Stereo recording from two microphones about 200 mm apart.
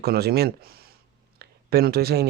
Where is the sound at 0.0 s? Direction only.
50° right (ahead or behind).